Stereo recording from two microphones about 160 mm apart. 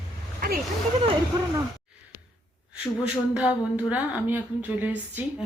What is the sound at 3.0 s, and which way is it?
A woman's voice, 10° right (ahead or behind).